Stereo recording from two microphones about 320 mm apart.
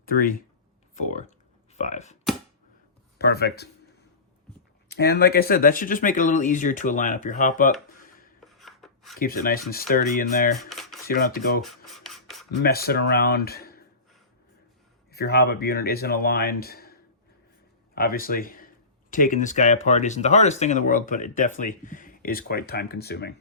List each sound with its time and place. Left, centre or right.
0.0 s speech: left
3.2 s speech: left
4.9 s speech: left
8.4 s rub: centre
9.1 s speech: left
10.6 s a sound: centre
11.1 s speech: left
11.6 s filing: centre
12.6 s speech: left
15.1 s speech: left